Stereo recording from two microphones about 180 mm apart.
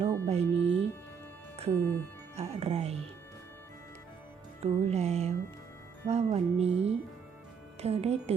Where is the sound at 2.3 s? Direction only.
35° right (ahead or behind).